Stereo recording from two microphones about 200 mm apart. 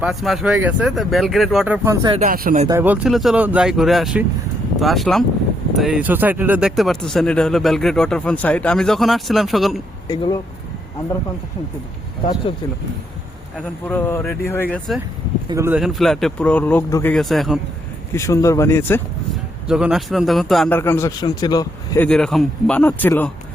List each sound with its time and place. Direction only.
0.0 s speech: centre (ahead or behind); by 2.1 s 15° right (ahead or behind)
2.1 s speech: 45° right (ahead or behind)
2.6 s speech: 10° right (ahead or behind)
10.1 s speech: 20° left (ahead or behind)
12.2 s speech: 25° left (ahead or behind)
13.6 s speech: 10° left (ahead or behind)
15.4 s speech: 15° right (ahead or behind)
15.8 s speech: centre (ahead or behind)
18.1 s speech: 15° left (ahead or behind)
19.6 s speech: 5° right (ahead or behind); by 22.0 s 20° left (ahead or behind)
22.0 s speech: 5° left (ahead or behind)